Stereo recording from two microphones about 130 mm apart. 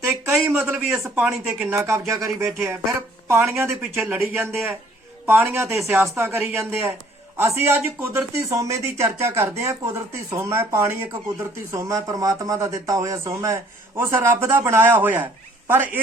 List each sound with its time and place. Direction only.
0.0 s a sound: 20° right (ahead or behind)
0.5 s speech: 15° right (ahead or behind)
1.2 s speech: 5° right (ahead or behind)
1.7 s speech: 20° right (ahead or behind)
5.2 s a man's voice: 15° right (ahead or behind)
5.6 s speech: centre (ahead or behind)
5.9 s speech: 15° right (ahead or behind)